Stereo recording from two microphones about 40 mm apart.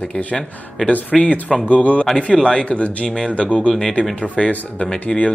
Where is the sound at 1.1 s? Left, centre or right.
Centre.